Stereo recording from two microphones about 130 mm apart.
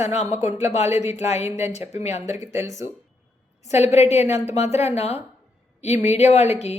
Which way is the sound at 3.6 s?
55° left (ahead or behind).